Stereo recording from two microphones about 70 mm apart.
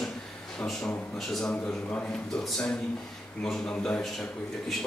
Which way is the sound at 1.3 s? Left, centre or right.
Centre.